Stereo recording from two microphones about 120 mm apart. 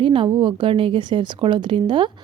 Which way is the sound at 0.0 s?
45° right (ahead or behind).